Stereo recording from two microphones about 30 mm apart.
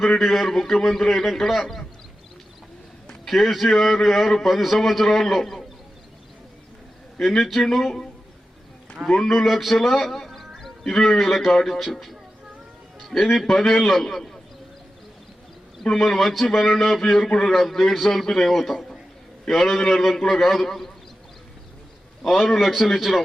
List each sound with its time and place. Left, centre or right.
0.2 s a man's voice: centre
0.6 s a man's voice: centre
3.2 s a man's voice: centre
7.2 s a man's voice: centre
9.0 s a man's voice: centre
9.3 s a man's voice: centre
13.2 s a man's voice: centre
14.0 s a man's voice: centre
16.0 s a man's voice: centre
17.0 s a man's voice: centre
17.5 s a man's voice: centre
22.3 s a man's voice: centre
22.5 s a man's voice: centre